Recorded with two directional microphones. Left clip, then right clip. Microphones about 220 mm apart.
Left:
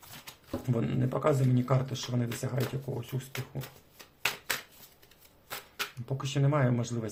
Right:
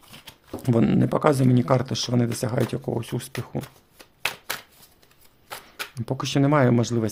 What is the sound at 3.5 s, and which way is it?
Speech, 50° right (ahead or behind).